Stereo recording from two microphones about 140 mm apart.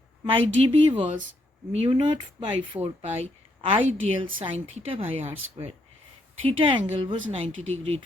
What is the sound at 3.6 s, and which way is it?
A woman's voice, 45° right (ahead or behind).